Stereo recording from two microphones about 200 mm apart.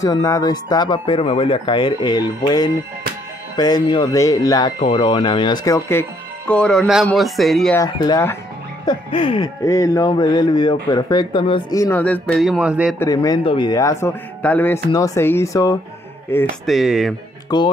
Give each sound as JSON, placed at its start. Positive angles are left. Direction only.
{"t": 0.0, "sound": "speech", "side_deg": 15}
{"t": 7.7, "sound": "speech", "side_deg": 20}
{"t": 13.0, "sound": "speech", "side_deg": 20}
{"t": 16.6, "sound": "speech", "side_deg": 0}
{"t": 17.5, "sound": "speech", "side_deg": 20}